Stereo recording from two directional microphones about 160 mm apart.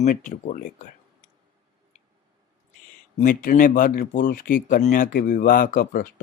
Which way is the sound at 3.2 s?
55° left (ahead or behind).